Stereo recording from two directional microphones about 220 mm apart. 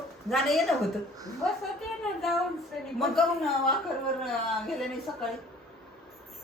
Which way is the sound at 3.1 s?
Centre (ahead or behind).